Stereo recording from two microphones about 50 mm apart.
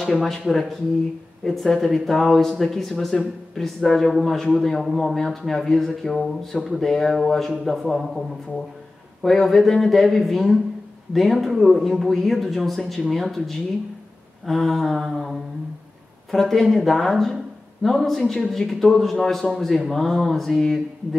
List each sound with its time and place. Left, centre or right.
0.0 s a man's voice: centre
9.2 s a man's voice: centre